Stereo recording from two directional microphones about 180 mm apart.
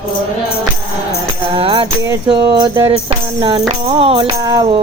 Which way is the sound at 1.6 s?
30° right (ahead or behind).